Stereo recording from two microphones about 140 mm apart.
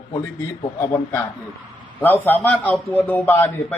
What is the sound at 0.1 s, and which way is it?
Speech, 25° left (ahead or behind).